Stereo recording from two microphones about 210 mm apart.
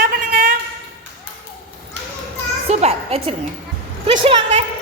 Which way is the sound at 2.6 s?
30° right (ahead or behind).